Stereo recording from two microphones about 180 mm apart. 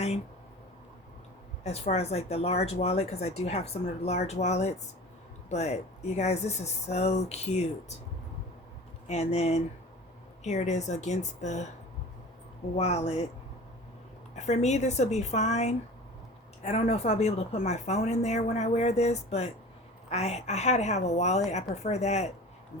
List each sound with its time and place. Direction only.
1.6 s speech: 35° left (ahead or behind)
9.0 s speech: 40° left (ahead or behind)
12.7 s speech: 35° left (ahead or behind)
14.3 s speech: 40° left (ahead or behind)